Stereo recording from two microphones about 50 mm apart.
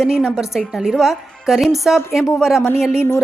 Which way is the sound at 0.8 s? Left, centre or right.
Centre.